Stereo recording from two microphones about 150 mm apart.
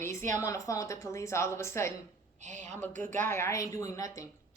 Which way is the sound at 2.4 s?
50° right (ahead or behind).